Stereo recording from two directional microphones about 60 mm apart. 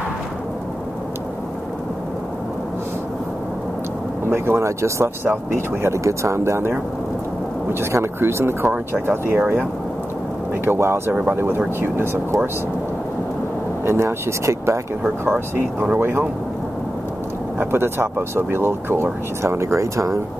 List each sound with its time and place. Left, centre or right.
4.3 s speech: right
7.8 s speech: right
10.6 s speech: right
13.8 s speech: right
15.2 s speech: right
17.6 s speech: right